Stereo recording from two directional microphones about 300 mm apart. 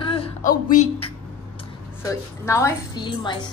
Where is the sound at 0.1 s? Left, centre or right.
Left.